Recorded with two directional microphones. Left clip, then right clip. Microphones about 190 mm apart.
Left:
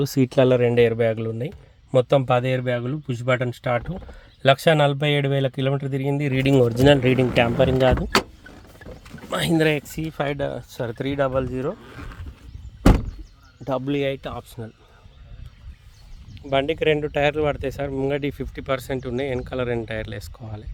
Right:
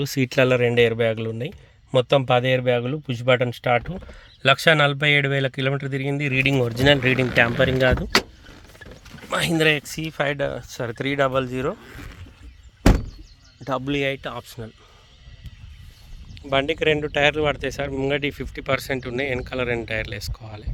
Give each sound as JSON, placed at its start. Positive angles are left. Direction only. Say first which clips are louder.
{"t": 0.0, "sound": "speech", "louder": "left 1 dB", "side_deg": 25}
{"t": 2.3, "sound": "speech", "louder": "right 3 dB", "side_deg": -5}
{"t": 4.1, "sound": "speech", "louder": "left 1 dB", "side_deg": 15}
{"t": 9.3, "sound": "speech", "louder": "right 1 dB", "side_deg": 10}
{"t": 13.7, "sound": "speech", "louder": "even", "side_deg": 10}
{"t": 16.3, "sound": "speech", "louder": "even", "side_deg": 5}